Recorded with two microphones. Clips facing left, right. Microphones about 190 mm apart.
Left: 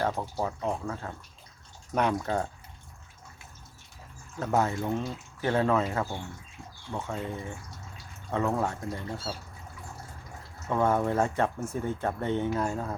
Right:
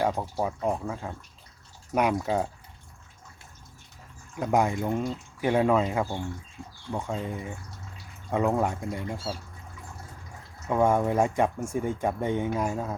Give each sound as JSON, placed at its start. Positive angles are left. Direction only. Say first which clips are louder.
{"t": 0.0, "sound": "speech", "louder": "right 3 dB", "side_deg": -10}
{"t": 4.4, "sound": "speech", "louder": "right 2 dB", "side_deg": -15}
{"t": 10.7, "sound": "speech", "louder": "right 3 dB", "side_deg": -10}